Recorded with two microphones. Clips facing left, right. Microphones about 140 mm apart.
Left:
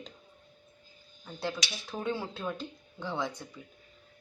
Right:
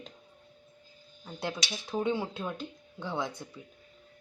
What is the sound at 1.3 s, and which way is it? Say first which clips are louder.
A woman's voice: even; 15° right (ahead or behind).